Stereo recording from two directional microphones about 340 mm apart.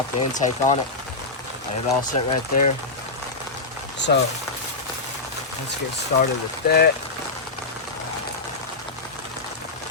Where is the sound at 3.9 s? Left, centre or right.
Left.